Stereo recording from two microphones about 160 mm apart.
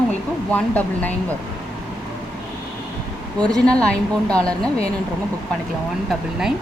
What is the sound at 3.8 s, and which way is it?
Speech, 5° left (ahead or behind).